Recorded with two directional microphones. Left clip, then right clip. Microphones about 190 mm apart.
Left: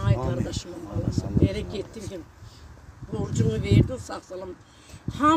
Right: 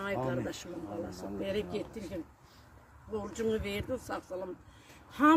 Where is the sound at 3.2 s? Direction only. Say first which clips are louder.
Left 5 dB; 5° right (ahead or behind).